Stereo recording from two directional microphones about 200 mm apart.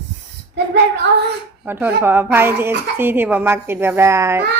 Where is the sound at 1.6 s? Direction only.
10° right (ahead or behind).